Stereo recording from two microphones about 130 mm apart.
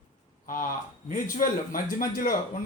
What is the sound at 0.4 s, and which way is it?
A man's voice, 90° left.